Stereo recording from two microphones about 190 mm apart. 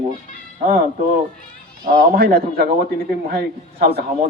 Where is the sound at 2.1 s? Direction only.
50° right (ahead or behind).